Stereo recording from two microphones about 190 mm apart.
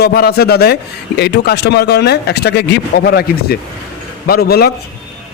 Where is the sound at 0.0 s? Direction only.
55° left (ahead or behind).